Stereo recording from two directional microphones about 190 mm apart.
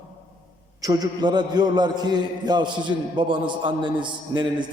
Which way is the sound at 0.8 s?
20° right (ahead or behind).